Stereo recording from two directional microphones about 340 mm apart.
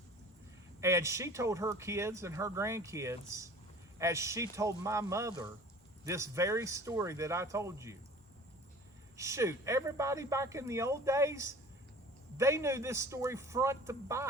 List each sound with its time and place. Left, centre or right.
0.8 s speech: centre
9.1 s speech: centre